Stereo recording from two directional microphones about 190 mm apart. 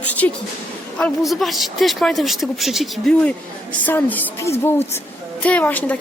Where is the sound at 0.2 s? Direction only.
10° left (ahead or behind).